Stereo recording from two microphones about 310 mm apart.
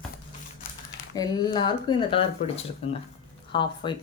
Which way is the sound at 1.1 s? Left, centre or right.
Centre.